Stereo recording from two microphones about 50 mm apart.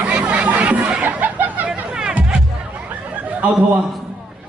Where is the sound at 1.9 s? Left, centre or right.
Centre.